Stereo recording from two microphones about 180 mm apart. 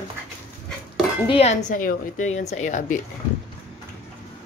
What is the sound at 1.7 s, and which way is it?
A woman's voice, 45° left (ahead or behind).